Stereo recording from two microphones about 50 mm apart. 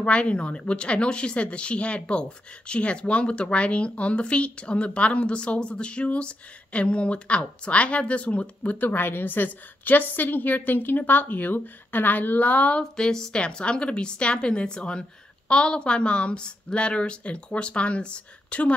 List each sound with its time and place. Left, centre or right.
0.0 s speech: left